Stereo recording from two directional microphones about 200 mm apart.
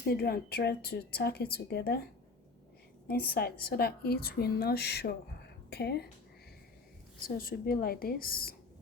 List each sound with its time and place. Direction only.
0.1 s a woman's voice: 50° left (ahead or behind)
3.1 s a woman's voice: 50° left (ahead or behind)
7.3 s a woman's voice: 45° left (ahead or behind)